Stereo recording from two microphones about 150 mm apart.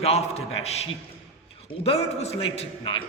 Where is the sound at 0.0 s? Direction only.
45° left (ahead or behind).